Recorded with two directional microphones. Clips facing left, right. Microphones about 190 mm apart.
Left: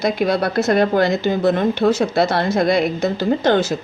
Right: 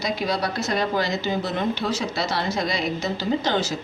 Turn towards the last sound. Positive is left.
turn(degrees=55)  # may be behind; listen again after turning